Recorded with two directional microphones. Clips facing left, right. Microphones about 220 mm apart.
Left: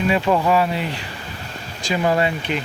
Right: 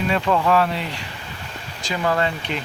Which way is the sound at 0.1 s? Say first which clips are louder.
Left 1 dB; 10° left (ahead or behind).